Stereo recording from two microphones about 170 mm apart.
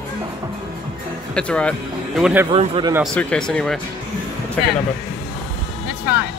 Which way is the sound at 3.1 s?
5° left (ahead or behind).